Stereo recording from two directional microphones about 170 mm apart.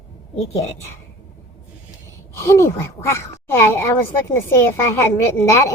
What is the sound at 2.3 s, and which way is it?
A woman's voice, 15° left (ahead or behind).